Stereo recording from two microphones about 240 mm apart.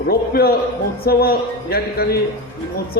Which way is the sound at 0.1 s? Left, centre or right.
Left.